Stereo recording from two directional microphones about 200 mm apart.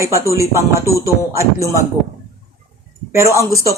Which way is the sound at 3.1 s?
15° right (ahead or behind).